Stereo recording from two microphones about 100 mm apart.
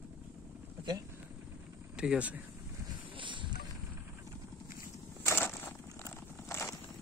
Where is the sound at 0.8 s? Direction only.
45° right (ahead or behind).